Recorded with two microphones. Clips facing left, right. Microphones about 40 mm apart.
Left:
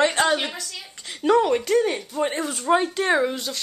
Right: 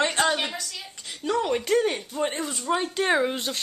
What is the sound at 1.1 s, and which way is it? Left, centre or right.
Speech, left.